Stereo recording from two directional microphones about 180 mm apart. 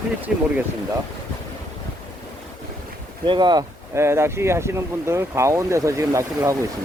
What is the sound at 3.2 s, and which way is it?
Speech, 25° right (ahead or behind).